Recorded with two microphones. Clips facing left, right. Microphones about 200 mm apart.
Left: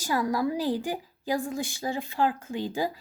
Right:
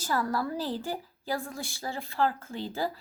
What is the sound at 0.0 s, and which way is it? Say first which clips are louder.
A woman's voice: left 3 dB; 15° left (ahead or behind).